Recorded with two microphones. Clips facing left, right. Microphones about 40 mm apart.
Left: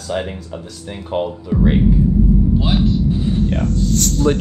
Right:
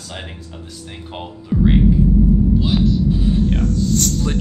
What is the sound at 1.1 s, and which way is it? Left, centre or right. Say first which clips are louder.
Speech: left 12 dB; centre.